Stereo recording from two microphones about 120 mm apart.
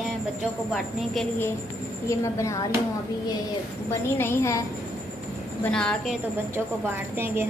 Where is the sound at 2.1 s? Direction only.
25° left (ahead or behind).